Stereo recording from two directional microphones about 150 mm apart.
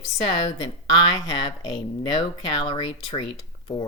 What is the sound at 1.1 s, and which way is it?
A woman's voice, 30° left (ahead or behind).